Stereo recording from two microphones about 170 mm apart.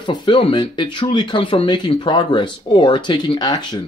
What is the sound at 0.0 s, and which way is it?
Speech, 25° left (ahead or behind).